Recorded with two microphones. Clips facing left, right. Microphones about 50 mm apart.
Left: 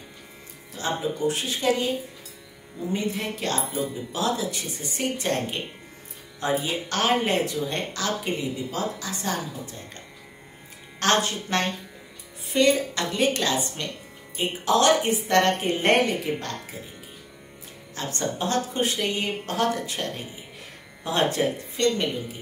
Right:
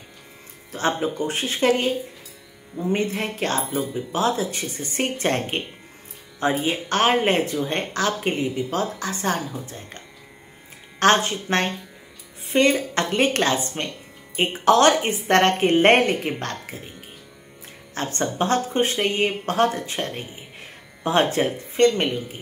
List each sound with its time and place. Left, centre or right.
0.7 s a woman's voice: right
6.6 s a woman's voice: right
11.0 s a woman's voice: right
17.9 s a woman's voice: right